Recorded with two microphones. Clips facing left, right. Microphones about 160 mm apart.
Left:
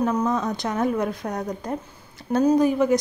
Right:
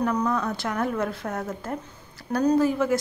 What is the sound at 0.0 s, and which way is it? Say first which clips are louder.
A woman's voice: left 2 dB; 20° left (ahead or behind).